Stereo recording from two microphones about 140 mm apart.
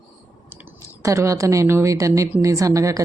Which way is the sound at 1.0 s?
20° right (ahead or behind).